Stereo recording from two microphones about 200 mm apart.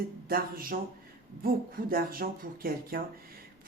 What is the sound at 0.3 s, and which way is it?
Speech, 45° right (ahead or behind).